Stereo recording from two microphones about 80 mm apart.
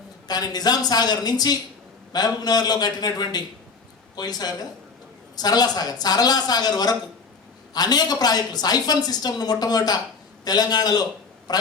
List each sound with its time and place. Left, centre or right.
0.3 s a woman's voice: left